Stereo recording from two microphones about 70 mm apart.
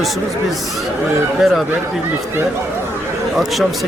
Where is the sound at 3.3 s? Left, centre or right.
Centre.